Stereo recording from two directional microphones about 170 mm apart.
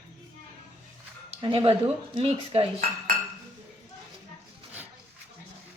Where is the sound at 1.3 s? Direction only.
30° right (ahead or behind).